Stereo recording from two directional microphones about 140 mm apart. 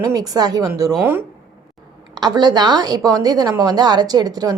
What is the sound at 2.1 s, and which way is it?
A woman's voice, 30° right (ahead or behind).